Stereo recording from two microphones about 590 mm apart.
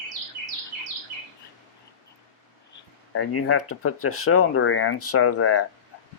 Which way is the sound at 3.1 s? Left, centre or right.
Left.